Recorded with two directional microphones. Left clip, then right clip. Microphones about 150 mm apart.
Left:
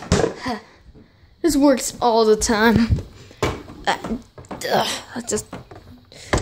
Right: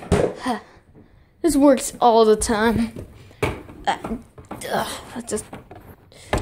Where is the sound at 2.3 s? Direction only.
15° left (ahead or behind).